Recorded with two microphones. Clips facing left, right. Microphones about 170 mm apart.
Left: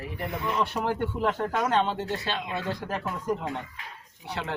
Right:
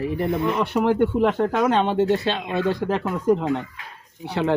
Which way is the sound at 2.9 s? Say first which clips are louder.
Right 9 dB; 90° right.